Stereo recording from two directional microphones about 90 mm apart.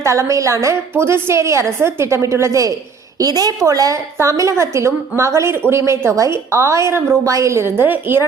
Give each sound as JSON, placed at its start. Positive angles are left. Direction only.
{"t": 0.0, "sound": "a woman's voice", "side_deg": -35}